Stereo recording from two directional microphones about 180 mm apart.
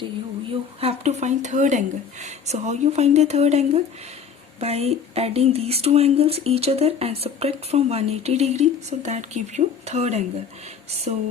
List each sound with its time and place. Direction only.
0.8 s speech: 35° right (ahead or behind)